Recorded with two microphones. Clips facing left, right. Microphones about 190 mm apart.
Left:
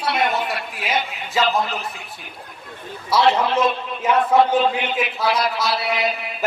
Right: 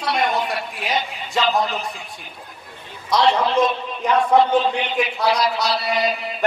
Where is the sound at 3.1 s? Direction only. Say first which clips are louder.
Left 1 dB; 5° left (ahead or behind).